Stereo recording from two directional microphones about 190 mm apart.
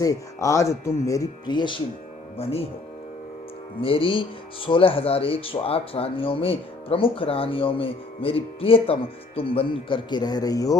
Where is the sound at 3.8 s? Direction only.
30° left (ahead or behind).